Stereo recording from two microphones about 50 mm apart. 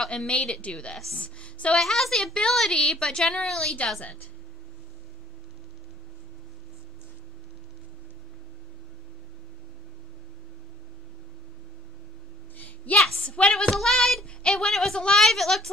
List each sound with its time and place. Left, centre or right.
0.1 s a woman's voice: left
0.9 s speech: centre
1.2 s a woman's voice: left
1.8 s speech: centre
12.5 s a sound: left
13.1 s a sound: left
13.7 s speech: centre